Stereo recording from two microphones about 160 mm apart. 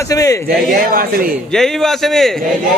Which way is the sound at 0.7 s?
65° right (ahead or behind).